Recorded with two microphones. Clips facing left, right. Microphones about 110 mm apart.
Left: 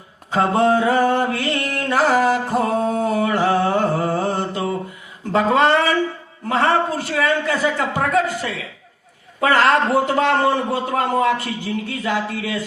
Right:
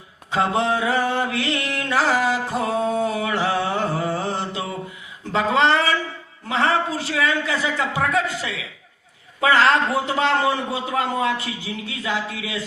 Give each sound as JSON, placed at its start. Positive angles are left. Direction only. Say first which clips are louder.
{"t": 0.3, "sound": "mantra", "louder": "left 4 dB", "side_deg": 45}
{"t": 5.3, "sound": "a sound", "louder": "left 3 dB", "side_deg": 45}
{"t": 6.5, "sound": "a man's voice", "louder": "left 3 dB", "side_deg": 50}